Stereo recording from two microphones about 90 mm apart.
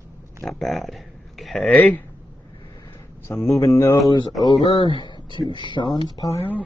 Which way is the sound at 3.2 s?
30° left (ahead or behind).